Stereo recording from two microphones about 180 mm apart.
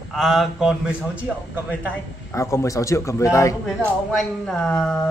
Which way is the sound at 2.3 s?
15° left (ahead or behind).